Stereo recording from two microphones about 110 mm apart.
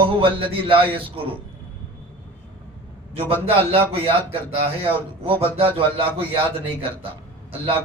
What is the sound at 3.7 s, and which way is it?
A man's voice, 60° right (ahead or behind).